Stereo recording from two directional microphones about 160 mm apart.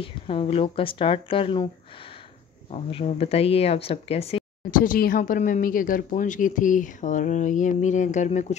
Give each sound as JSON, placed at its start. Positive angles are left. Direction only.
{"t": 0.0, "sound": "speech", "side_deg": 35}
{"t": 2.7, "sound": "speech", "side_deg": 40}
{"t": 4.6, "sound": "speech", "side_deg": 60}